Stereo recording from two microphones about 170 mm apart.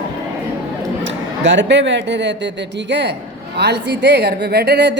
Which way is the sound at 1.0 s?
90° right.